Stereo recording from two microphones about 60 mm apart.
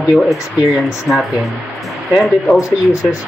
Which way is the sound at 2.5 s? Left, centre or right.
Left.